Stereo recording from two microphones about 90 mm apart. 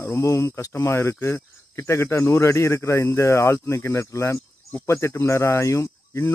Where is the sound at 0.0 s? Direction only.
35° left (ahead or behind).